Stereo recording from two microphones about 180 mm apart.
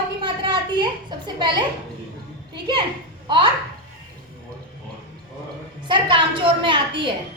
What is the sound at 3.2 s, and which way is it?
Speech, 25° right (ahead or behind).